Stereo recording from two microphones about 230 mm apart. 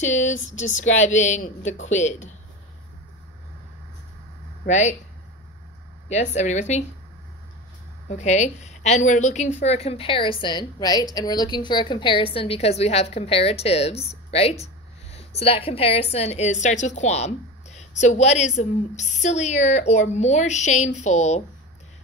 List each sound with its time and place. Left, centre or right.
0.0 s speech: left
4.6 s speech: left
6.0 s speech: left
8.1 s a woman's voice: left